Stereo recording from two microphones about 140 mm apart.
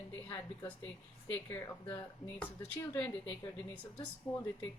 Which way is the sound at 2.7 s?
15° left (ahead or behind).